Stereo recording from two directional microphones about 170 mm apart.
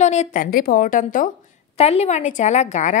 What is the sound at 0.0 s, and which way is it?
A woman's voice, 40° left (ahead or behind).